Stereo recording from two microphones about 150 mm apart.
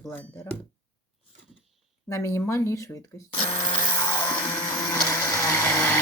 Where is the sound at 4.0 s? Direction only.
30° left (ahead or behind).